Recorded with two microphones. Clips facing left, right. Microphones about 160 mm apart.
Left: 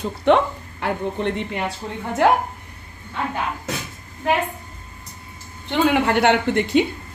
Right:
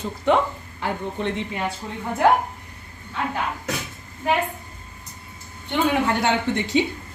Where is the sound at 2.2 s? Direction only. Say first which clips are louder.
Left 1 dB; 80° left.